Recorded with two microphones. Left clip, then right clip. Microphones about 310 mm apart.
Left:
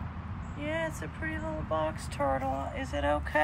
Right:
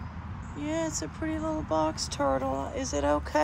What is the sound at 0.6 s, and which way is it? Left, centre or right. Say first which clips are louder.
Vehicle: right 2 dB; centre.